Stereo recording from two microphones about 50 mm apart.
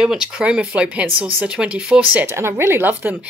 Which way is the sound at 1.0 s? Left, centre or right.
Right.